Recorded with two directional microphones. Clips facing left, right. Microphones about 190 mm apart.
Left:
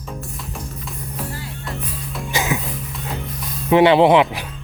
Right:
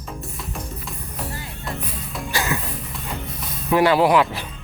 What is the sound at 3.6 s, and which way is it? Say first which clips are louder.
Speech: left 4 dB; 20° left (ahead or behind).